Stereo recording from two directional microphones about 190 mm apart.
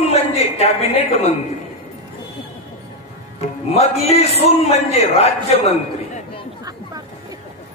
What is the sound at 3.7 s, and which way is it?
A man's voice, 35° left (ahead or behind).